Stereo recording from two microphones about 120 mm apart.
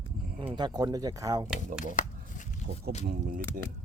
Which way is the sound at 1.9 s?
90° left.